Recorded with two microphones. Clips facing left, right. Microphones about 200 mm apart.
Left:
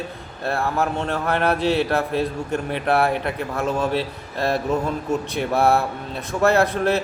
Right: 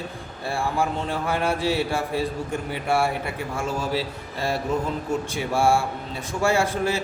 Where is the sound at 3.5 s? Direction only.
60° left (ahead or behind).